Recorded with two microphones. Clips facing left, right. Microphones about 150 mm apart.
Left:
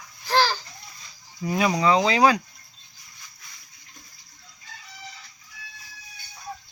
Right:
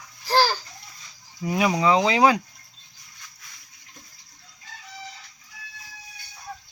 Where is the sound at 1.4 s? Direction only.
15° right (ahead or behind).